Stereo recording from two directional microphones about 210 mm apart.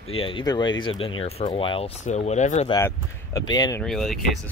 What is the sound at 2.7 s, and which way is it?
Speech, 15° left (ahead or behind).